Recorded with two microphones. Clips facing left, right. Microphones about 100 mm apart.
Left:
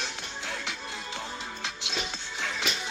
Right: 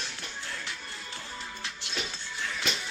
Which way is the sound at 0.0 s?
20° left (ahead or behind).